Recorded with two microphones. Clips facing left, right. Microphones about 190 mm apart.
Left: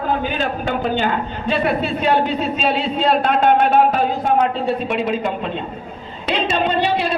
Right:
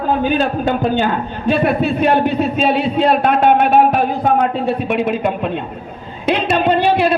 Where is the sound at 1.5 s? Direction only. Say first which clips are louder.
Right 4 dB; 55° right (ahead or behind).